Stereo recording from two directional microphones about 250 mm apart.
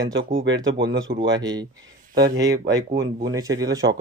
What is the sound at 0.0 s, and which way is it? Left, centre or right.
Speech, right.